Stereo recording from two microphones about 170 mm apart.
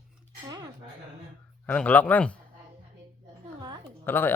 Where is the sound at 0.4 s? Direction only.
20° right (ahead or behind).